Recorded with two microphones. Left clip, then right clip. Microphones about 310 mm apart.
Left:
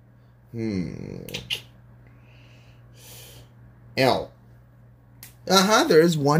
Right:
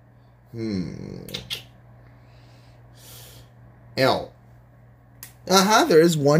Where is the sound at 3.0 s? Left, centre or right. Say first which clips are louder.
Even; centre.